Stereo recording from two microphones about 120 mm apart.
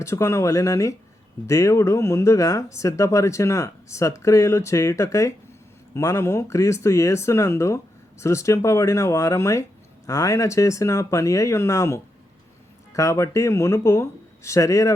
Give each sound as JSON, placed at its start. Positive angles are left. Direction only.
{"t": 0.0, "sound": "speech", "side_deg": 25}